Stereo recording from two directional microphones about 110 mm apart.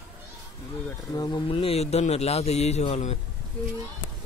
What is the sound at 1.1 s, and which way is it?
Speech, 35° left (ahead or behind).